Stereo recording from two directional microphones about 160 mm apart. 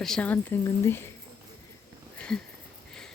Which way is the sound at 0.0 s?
5° left (ahead or behind).